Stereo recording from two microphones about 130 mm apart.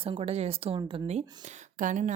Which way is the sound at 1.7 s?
75° right (ahead or behind).